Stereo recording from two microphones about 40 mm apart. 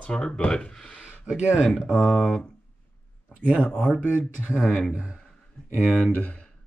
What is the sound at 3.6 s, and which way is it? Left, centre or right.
Speech, left.